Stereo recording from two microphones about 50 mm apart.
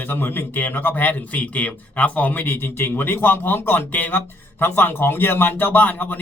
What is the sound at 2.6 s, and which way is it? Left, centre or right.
A man's voice, left.